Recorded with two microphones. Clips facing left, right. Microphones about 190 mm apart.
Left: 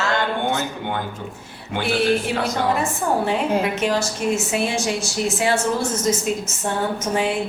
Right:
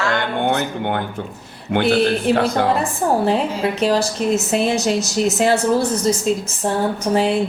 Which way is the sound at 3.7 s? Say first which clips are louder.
Right 4 dB; 35° right (ahead or behind).